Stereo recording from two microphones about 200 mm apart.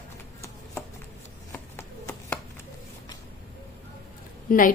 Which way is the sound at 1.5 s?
10° left (ahead or behind).